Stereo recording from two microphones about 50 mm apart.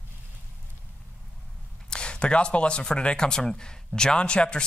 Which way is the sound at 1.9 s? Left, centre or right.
Centre.